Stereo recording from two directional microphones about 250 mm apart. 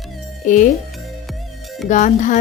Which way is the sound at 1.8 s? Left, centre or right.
Left.